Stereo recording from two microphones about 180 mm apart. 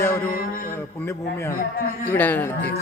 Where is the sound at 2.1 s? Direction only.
10° left (ahead or behind).